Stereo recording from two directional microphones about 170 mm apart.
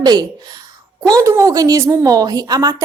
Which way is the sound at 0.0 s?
25° right (ahead or behind).